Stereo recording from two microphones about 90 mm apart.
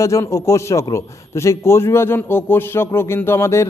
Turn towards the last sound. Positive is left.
turn(degrees=30)  # may be behind; listen again after turning